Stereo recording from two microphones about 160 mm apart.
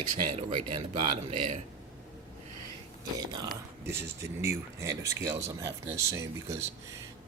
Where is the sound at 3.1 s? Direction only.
25° right (ahead or behind).